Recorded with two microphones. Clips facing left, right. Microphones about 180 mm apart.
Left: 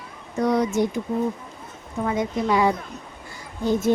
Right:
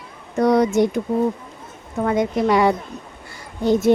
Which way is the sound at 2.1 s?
70° right (ahead or behind).